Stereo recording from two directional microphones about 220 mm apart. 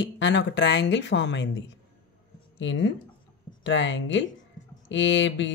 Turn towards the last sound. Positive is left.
turn(degrees=55)  # may be behind; listen again after turning